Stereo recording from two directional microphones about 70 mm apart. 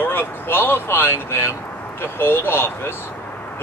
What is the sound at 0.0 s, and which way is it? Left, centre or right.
Speech, left.